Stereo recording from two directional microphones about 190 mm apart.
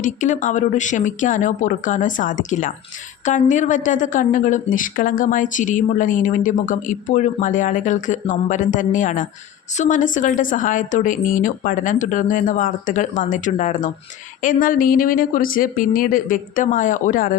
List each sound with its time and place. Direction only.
0.0 s a woman's voice: 40° left (ahead or behind)